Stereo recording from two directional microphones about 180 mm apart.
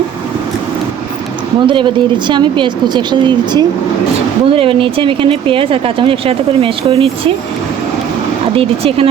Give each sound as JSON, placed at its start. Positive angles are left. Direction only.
{"t": 1.6, "sound": "speech", "side_deg": -25}
{"t": 8.5, "sound": "speech", "side_deg": -30}